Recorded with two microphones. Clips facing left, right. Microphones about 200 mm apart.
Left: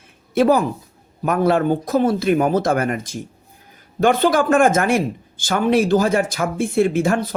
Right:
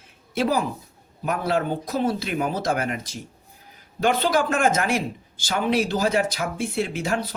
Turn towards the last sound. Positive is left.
turn(degrees=50)  # may be behind; listen again after turning